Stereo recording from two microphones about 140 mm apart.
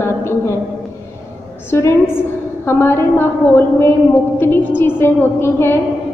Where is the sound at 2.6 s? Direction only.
20° left (ahead or behind).